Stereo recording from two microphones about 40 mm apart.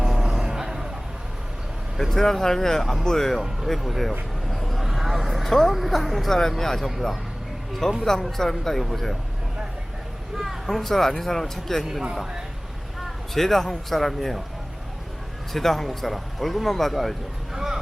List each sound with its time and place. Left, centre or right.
0.0 s vehicle: centre
2.0 s speech: centre
4.4 s vehicle: centre
8.0 s speech: centre
10.3 s speech: centre
13.3 s speech: centre
15.5 s speech: centre
17.5 s a sound: centre